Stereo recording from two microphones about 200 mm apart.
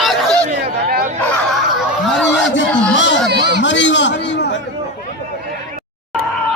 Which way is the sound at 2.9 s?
65° left (ahead or behind).